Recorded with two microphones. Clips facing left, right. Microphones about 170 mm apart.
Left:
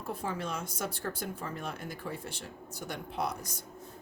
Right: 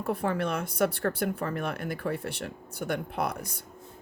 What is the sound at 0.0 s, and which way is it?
A woman's voice, 65° right (ahead or behind).